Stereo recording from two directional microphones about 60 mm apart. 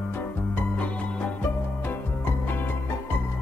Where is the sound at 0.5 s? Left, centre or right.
Left.